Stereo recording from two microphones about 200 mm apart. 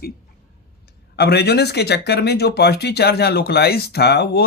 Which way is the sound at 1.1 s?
55° left (ahead or behind).